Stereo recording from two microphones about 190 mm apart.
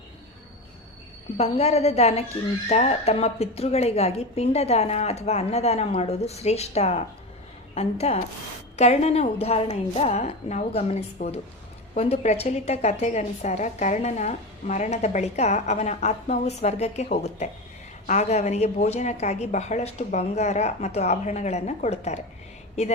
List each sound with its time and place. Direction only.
1.4 s a woman's voice: 35° left (ahead or behind)